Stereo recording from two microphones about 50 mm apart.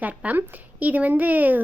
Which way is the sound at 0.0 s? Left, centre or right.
Right.